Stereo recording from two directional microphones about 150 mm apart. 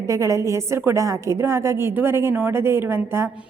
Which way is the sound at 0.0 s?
20° right (ahead or behind).